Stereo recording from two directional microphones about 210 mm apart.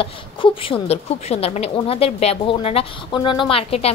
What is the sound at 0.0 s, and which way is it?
A woman's voice, 25° left (ahead or behind).